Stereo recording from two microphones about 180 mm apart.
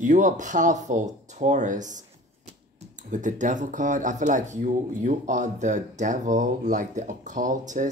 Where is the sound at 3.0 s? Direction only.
45° right (ahead or behind).